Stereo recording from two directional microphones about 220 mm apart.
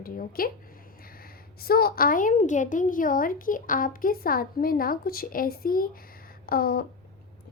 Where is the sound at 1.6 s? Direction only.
45° left (ahead or behind).